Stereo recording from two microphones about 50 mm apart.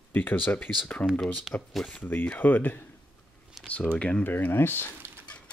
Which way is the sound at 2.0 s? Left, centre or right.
Left.